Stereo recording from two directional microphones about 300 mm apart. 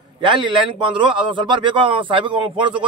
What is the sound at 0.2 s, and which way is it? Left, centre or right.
A man's voice, centre.